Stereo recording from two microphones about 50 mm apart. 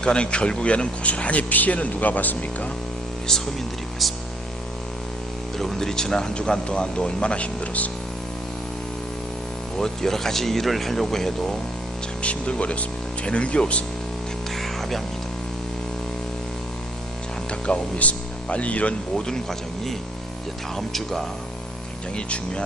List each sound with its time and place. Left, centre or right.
0.0 s speech: centre; by 2.6 s left
4.0 s speech: centre
5.5 s speech: centre; by 7.9 s left
9.7 s speech: centre
12.2 s speech: left
14.5 s music: centre
17.7 s speech: left
19.1 s speech: centre
20.7 s speech: centre
22.1 s speech: centre